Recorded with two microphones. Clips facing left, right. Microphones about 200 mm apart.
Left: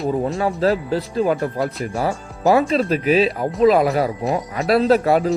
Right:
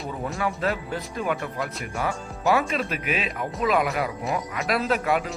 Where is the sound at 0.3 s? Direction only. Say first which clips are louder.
Left 8 dB; 35° left (ahead or behind).